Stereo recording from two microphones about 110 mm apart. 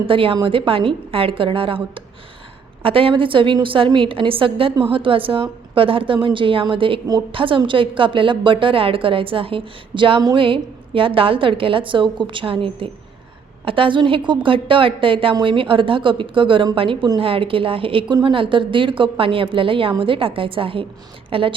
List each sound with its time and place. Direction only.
0.1 s a woman's voice: 55° right (ahead or behind)